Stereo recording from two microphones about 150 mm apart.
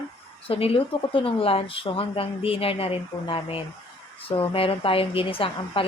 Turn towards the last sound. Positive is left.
turn(degrees=35)  # may be behind; listen again after turning